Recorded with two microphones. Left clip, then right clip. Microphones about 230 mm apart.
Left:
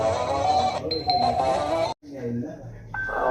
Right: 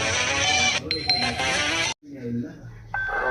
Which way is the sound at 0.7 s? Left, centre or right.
Right.